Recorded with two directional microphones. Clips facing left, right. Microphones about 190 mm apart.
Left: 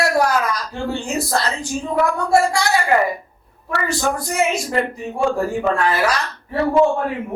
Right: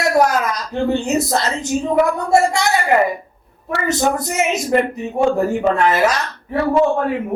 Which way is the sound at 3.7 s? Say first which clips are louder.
Right 3 dB; 20° right (ahead or behind).